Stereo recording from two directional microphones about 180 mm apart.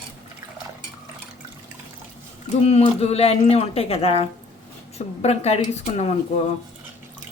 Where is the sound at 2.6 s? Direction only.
35° left (ahead or behind).